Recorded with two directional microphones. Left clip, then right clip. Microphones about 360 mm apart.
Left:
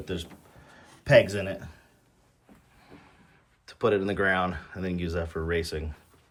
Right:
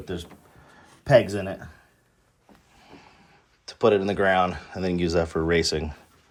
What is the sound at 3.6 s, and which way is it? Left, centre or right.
Speech, centre.